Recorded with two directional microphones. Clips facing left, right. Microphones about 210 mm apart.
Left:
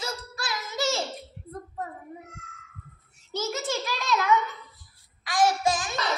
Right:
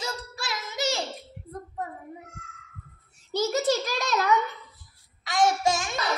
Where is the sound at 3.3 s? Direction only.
40° right (ahead or behind).